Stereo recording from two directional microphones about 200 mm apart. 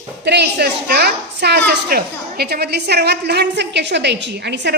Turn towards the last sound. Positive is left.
turn(degrees=-55)  # may be behind; listen again after turning